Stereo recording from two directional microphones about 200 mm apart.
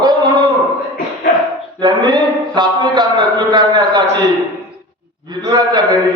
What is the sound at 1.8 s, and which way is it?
Speech, 20° right (ahead or behind).